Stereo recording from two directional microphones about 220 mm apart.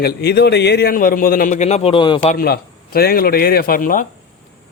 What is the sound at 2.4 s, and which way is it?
A man's voice, 45° left (ahead or behind).